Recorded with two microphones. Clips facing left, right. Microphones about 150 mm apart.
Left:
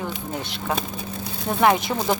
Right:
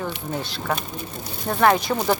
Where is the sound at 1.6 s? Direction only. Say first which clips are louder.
Right 1 dB; 20° left (ahead or behind).